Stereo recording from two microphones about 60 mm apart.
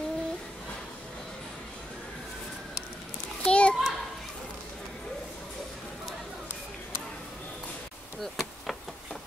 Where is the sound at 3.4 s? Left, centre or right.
Centre.